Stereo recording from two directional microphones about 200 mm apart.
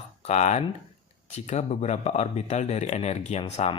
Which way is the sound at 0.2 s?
35° left (ahead or behind).